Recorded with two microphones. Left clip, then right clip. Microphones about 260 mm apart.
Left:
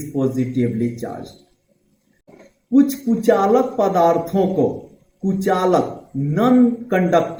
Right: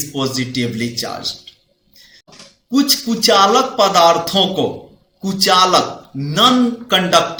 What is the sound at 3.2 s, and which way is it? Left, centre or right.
Speech, right.